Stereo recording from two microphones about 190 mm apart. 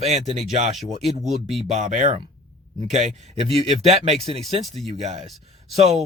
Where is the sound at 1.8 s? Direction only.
40° right (ahead or behind).